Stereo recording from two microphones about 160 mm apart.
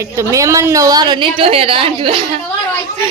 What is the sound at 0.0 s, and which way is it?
A woman's voice, 20° right (ahead or behind).